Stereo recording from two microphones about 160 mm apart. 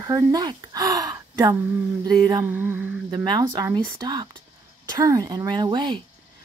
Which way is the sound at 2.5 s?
10° right (ahead or behind).